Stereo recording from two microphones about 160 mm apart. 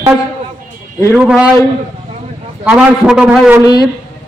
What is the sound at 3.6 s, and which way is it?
Speech, 25° left (ahead or behind).